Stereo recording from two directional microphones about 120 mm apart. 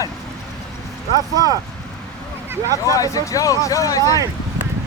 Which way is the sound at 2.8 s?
30° left (ahead or behind).